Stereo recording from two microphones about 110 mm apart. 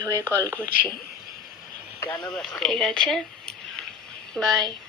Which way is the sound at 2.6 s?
5° left (ahead or behind).